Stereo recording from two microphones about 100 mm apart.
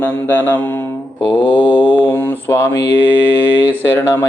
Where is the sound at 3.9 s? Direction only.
25° left (ahead or behind).